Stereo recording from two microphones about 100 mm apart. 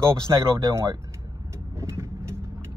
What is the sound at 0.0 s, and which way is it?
Speech, 30° right (ahead or behind).